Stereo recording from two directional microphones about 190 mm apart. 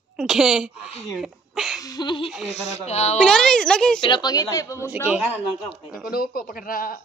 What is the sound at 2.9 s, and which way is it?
Speech, 35° left (ahead or behind).